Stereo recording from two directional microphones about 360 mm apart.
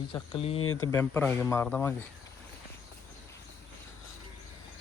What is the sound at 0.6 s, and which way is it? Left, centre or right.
Speech, left.